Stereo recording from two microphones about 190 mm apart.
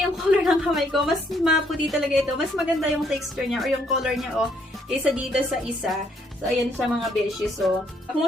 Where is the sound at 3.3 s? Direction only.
Centre (ahead or behind).